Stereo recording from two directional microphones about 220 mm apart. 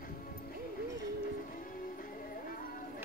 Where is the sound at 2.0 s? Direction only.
40° left (ahead or behind).